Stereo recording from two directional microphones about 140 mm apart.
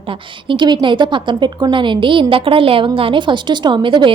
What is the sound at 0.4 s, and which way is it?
A woman's voice, 35° right (ahead or behind).